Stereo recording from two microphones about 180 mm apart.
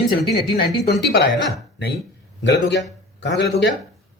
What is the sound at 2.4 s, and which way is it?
Speech, 75° left (ahead or behind).